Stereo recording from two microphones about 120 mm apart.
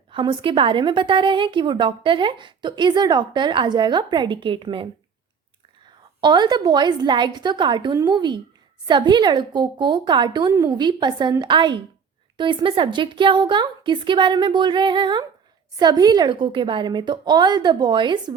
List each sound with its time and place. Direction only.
0.1 s a woman's voice: 45° right (ahead or behind)
6.1 s a woman's voice: 40° right (ahead or behind)